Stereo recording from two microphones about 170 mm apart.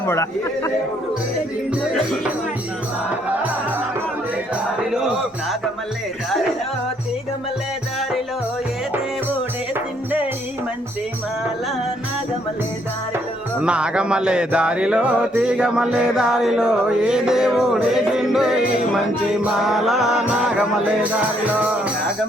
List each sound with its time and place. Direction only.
0.0 s speech: 15° left (ahead or behind)
4.8 s speech: 5° right (ahead or behind)
9.7 s music: 10° right (ahead or behind)
13.1 s music: 5° right (ahead or behind)